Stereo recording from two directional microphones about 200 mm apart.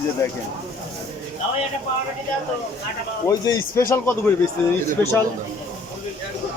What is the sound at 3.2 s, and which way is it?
Speech, 15° left (ahead or behind).